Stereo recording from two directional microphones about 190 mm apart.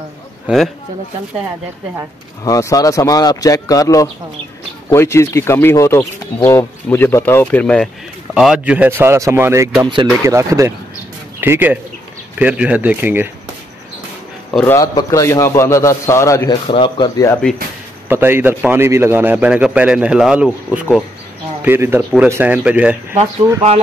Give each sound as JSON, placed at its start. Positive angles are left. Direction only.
{"t": 2.4, "sound": "a man's voice", "side_deg": 20}
{"t": 14.5, "sound": "a man's voice", "side_deg": 5}
{"t": 14.8, "sound": "speech", "side_deg": 15}
{"t": 16.6, "sound": "speech", "side_deg": 25}
{"t": 18.0, "sound": "a man's voice", "side_deg": -10}